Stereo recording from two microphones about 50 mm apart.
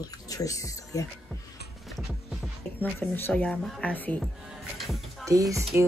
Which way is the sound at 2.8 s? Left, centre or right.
Left.